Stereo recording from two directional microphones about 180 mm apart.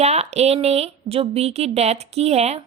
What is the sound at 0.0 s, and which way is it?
Speech, 35° right (ahead or behind).